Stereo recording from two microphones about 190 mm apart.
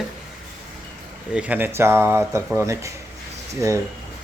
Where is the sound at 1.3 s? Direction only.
10° right (ahead or behind).